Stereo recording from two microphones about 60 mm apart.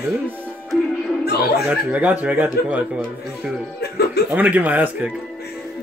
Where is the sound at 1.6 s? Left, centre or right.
Right.